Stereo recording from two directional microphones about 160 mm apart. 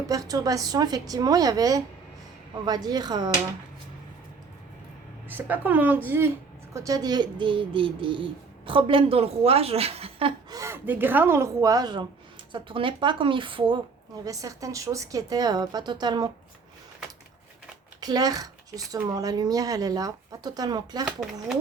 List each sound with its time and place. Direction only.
0.1 s a woman's voice: 20° right (ahead or behind)
5.3 s speech: 10° right (ahead or behind); by 10.3 s 35° right (ahead or behind)
10.5 s speech: 20° right (ahead or behind)
14.3 s a woman's voice: 20° right (ahead or behind)
18.0 s a woman's voice: 25° right (ahead or behind)